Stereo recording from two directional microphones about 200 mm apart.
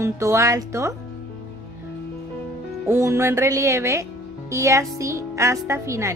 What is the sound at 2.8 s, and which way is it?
Speech, 15° right (ahead or behind).